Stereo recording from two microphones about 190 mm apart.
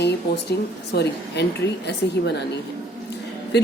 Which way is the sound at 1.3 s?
65° left (ahead or behind).